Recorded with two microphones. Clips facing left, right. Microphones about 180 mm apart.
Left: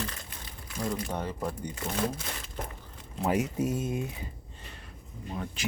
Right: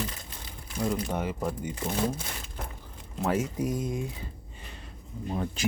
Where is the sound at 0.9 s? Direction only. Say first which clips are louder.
Right 3 dB; 10° right (ahead or behind).